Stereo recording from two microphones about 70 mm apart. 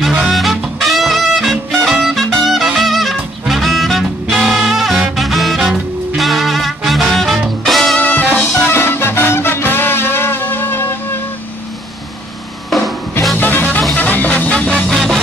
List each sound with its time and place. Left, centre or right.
0.3 s music: centre
8.0 s music: left
12.6 s music: centre
13.4 s music: left
14.7 s music: centre